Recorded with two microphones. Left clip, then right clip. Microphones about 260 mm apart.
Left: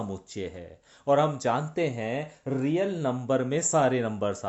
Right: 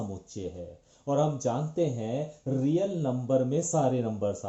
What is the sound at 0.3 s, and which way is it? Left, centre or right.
Speech, left.